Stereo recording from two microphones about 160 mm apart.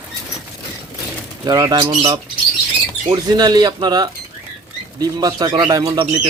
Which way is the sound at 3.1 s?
25° right (ahead or behind).